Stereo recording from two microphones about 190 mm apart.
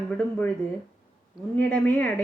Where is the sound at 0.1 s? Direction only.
5° left (ahead or behind).